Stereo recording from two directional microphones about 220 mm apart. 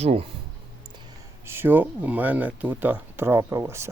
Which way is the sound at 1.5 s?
10° right (ahead or behind).